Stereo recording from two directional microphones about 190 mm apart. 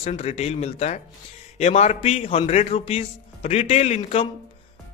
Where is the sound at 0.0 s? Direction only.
35° left (ahead or behind).